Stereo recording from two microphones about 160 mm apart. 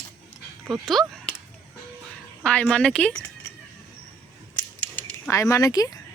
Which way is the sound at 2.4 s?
5° left (ahead or behind).